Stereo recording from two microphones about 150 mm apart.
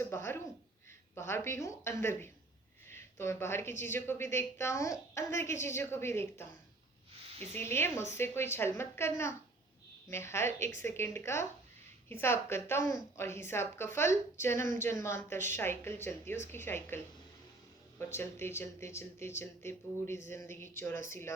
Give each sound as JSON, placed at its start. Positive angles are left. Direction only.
{"t": 0.0, "sound": "a woman's voice", "side_deg": 15}
{"t": 7.5, "sound": "a woman's voice", "side_deg": 15}
{"t": 18.1, "sound": "a woman's voice", "side_deg": 15}